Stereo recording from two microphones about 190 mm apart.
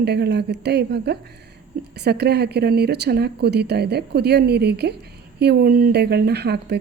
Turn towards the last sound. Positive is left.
turn(degrees=-60)  # may be behind; listen again after turning